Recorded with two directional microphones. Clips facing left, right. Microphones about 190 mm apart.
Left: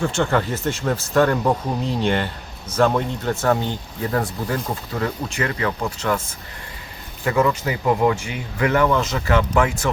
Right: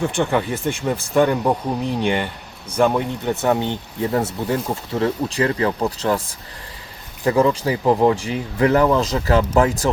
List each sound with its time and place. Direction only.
0.0 s speech: 15° right (ahead or behind); by 9.9 s 35° right (ahead or behind)